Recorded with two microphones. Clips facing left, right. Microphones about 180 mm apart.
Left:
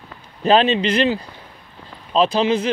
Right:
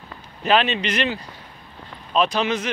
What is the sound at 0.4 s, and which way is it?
A man's voice, 35° left (ahead or behind).